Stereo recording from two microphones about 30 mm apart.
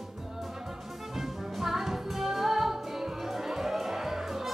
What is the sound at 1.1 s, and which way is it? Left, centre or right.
Music, centre.